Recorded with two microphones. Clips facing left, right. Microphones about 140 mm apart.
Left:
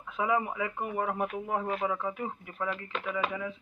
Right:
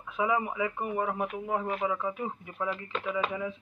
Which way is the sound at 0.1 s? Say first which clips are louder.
Even; 15° right (ahead or behind).